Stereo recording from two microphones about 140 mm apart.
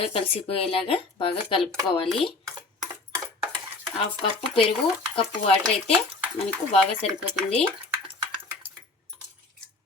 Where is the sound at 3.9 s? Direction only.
40° left (ahead or behind).